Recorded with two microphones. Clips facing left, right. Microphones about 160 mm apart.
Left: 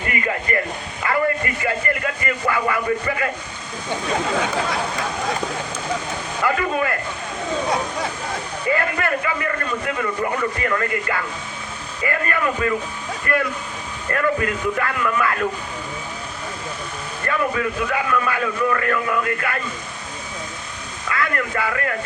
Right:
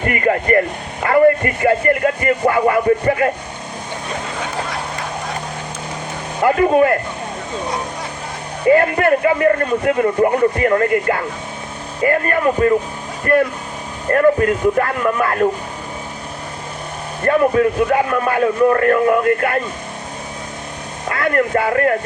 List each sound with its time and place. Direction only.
0.0 s a man's voice: 45° right (ahead or behind)
6.4 s a man's voice: 50° right (ahead or behind)
8.6 s a man's voice: 50° right (ahead or behind)
17.2 s a man's voice: 50° right (ahead or behind)
21.0 s a man's voice: 55° right (ahead or behind)